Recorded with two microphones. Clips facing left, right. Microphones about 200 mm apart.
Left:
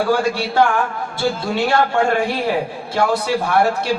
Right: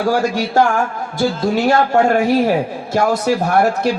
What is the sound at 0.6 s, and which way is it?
A man's voice, 40° right (ahead or behind).